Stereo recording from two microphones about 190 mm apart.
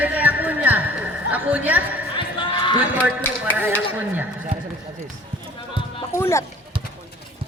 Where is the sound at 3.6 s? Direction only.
10° right (ahead or behind).